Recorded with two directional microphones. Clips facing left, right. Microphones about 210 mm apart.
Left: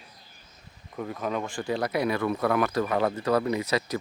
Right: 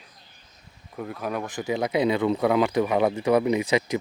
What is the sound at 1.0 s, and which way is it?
Speech, 5° right (ahead or behind).